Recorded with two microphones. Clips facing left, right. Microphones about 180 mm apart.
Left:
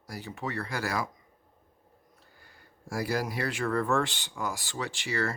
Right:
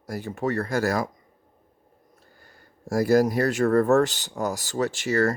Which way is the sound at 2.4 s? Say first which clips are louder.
Right 3 dB; 45° right (ahead or behind).